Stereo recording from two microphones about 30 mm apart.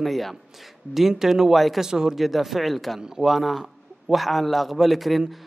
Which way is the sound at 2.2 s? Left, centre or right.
Centre.